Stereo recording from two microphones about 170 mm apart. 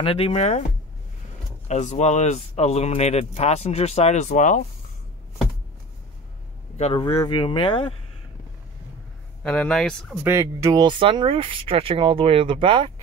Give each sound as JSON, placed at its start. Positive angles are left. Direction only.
{"t": 0.0, "sound": "speech", "side_deg": 35}
{"t": 6.8, "sound": "speech", "side_deg": 30}
{"t": 9.4, "sound": "speech", "side_deg": 5}
{"t": 10.2, "sound": "speech", "side_deg": -15}